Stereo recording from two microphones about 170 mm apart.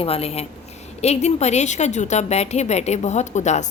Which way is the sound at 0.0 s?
35° left (ahead or behind).